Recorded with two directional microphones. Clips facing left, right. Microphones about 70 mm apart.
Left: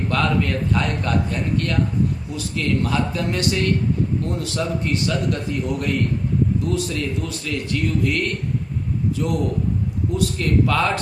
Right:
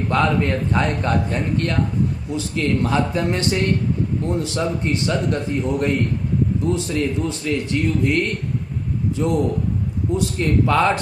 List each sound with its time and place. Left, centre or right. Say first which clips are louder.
0.1 s a man's voice: right 3 dB; right